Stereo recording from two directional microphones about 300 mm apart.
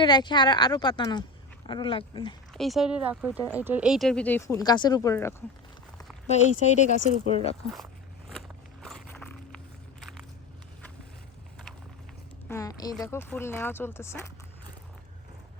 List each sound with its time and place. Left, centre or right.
0.0 s speech: centre
2.5 s speech: centre
6.2 s speech: left
8.3 s walk: centre
12.5 s speech: centre